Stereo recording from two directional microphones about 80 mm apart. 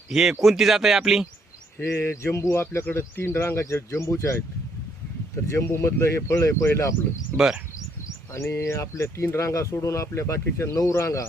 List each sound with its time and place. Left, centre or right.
0.1 s speech: centre
1.8 s speech: left
5.5 s speech: left
7.3 s speech: centre
8.3 s speech: left